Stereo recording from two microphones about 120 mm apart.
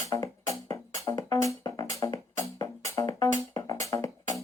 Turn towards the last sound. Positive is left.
turn(degrees=25)  # may be behind; listen again after turning